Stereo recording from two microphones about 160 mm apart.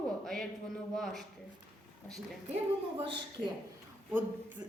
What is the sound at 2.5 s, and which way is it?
Speech, 35° right (ahead or behind).